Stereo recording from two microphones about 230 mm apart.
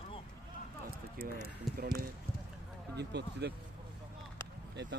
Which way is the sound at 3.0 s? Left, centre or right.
Right.